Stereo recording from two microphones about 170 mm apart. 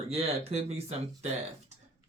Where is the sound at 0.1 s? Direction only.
35° right (ahead or behind).